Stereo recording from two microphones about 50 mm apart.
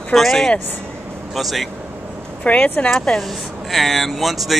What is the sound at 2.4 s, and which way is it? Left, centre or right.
Speech, left.